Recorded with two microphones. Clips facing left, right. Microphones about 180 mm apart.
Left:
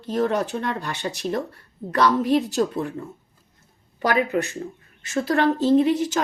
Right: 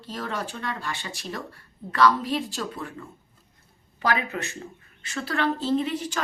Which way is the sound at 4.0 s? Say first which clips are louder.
Left 6 dB; 50° left (ahead or behind).